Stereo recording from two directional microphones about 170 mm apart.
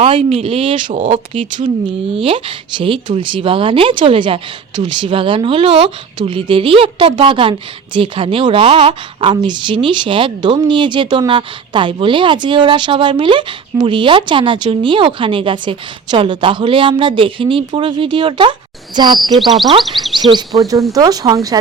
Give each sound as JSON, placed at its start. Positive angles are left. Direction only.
{"t": 0.0, "sound": "speech", "side_deg": -35}
{"t": 0.8, "sound": "speech", "side_deg": -45}
{"t": 2.1, "sound": "a woman's voice", "side_deg": -30}
{"t": 19.2, "sound": "speech", "side_deg": 0}
{"t": 19.9, "sound": "a woman's voice", "side_deg": -30}